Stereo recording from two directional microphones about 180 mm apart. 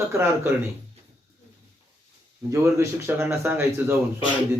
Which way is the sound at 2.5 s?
15° right (ahead or behind).